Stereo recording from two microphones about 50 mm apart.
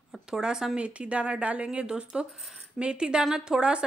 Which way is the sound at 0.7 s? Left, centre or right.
Right.